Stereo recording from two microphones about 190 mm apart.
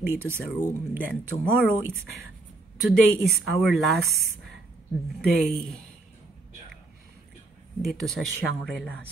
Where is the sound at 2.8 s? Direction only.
Centre (ahead or behind).